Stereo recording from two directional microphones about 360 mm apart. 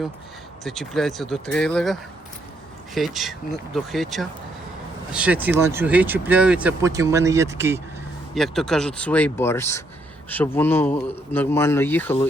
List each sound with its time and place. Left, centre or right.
0.6 s speech: centre